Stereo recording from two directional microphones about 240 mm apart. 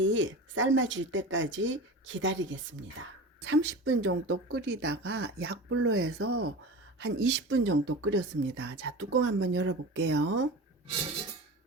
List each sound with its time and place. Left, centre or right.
0.0 s speech: right
6.1 s speech: right
7.0 s speech: right